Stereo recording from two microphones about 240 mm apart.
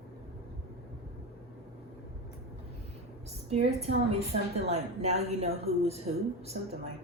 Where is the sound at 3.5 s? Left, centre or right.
Right.